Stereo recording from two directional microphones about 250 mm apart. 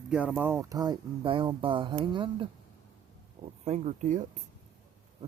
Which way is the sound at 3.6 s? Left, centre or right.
Right.